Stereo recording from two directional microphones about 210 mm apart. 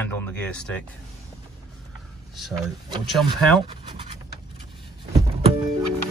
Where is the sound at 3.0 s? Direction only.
Centre (ahead or behind).